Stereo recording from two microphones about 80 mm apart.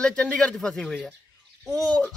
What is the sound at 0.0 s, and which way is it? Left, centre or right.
Speech, centre.